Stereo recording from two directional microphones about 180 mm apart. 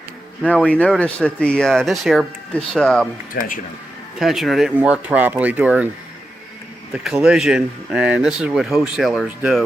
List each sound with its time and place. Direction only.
0.4 s speech: 5° left (ahead or behind)
3.3 s speech: 55° left (ahead or behind)
4.2 s speech: centre (ahead or behind)
6.9 s speech: 5° right (ahead or behind)